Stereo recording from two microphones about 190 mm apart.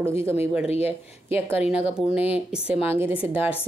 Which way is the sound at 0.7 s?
35° left (ahead or behind).